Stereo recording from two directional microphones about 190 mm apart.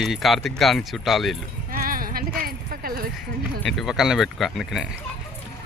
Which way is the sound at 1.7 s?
50° right (ahead or behind).